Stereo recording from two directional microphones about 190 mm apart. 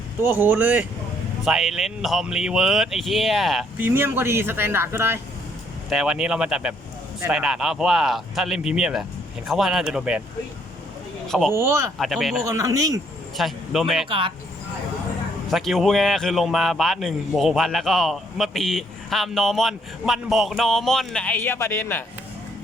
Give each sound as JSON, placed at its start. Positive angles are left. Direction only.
{"t": 0.2, "sound": "a man's voice", "side_deg": -10}
{"t": 11.3, "sound": "a man's voice", "side_deg": 0}
{"t": 11.5, "sound": "speech", "side_deg": -15}
{"t": 11.9, "sound": "a man's voice", "side_deg": 0}
{"t": 12.4, "sound": "speech", "side_deg": -15}
{"t": 13.3, "sound": "a man's voice", "side_deg": 0}
{"t": 14.1, "sound": "speech", "side_deg": -25}
{"t": 15.4, "sound": "a man's voice", "side_deg": 0}